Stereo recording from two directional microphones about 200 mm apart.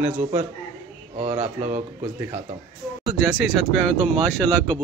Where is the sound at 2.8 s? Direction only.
Centre (ahead or behind).